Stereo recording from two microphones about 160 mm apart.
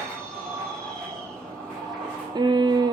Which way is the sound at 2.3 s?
30° right (ahead or behind).